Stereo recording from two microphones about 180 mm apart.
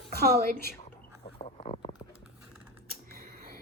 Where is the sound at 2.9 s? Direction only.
55° right (ahead or behind).